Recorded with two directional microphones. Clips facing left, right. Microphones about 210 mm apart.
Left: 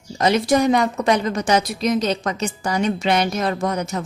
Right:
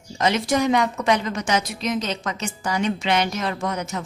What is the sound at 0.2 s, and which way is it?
A woman's voice, 35° left (ahead or behind).